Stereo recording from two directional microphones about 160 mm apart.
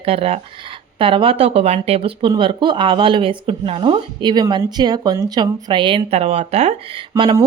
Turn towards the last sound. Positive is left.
turn(degrees=-25)  # may be behind; listen again after turning